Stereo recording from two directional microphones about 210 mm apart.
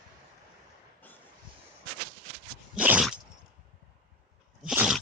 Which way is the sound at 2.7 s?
5° right (ahead or behind).